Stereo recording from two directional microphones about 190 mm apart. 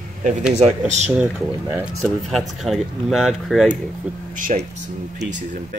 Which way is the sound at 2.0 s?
Centre (ahead or behind).